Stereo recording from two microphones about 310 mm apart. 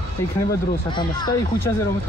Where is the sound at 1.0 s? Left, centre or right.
Centre.